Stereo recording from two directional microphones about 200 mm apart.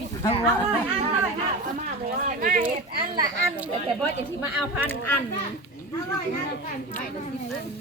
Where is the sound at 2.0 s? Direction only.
45° right (ahead or behind).